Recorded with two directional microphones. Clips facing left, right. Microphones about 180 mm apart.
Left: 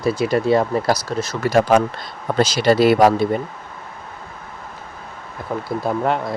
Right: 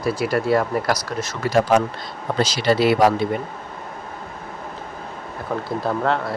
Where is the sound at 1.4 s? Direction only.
50° left (ahead or behind).